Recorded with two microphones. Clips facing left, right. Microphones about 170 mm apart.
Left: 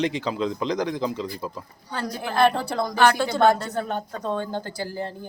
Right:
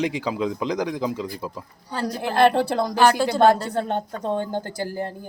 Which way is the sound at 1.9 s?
35° right (ahead or behind).